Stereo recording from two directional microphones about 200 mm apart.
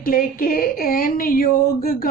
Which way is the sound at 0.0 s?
45° left (ahead or behind).